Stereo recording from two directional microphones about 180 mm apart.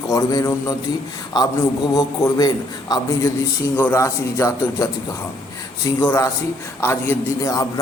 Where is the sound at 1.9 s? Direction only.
20° left (ahead or behind).